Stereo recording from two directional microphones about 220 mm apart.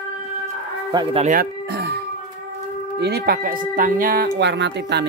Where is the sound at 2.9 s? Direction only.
50° right (ahead or behind).